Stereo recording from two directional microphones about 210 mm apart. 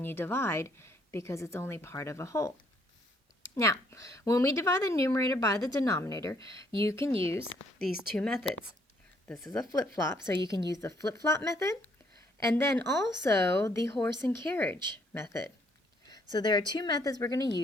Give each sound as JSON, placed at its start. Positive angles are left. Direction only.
{"t": 0.0, "sound": "a woman's voice", "side_deg": 10}
{"t": 3.5, "sound": "a woman's voice", "side_deg": 15}
{"t": 7.0, "sound": "speech", "side_deg": -25}
{"t": 7.8, "sound": "a woman's voice", "side_deg": 5}